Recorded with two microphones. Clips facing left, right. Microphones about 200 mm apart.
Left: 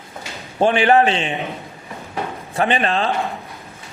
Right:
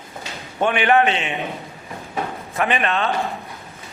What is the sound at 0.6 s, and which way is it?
Speech, 30° left (ahead or behind).